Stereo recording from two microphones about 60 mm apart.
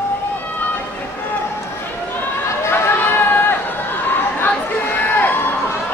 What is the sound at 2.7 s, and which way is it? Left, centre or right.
Chatter, left.